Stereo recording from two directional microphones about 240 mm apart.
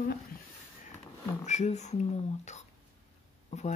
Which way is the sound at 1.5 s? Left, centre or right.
Left.